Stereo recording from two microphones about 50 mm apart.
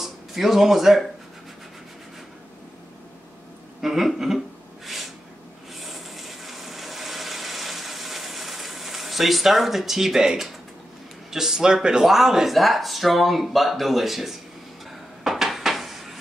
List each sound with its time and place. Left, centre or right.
0.0 s speech: centre
3.8 s speech: centre
5.8 s a sound: centre
11.2 s a man's voice: centre
15.2 s dishes: centre